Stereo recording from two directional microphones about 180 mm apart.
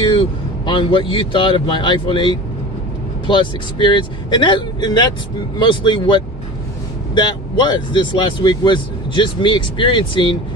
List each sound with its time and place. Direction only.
0.0 s speech: 30° left (ahead or behind)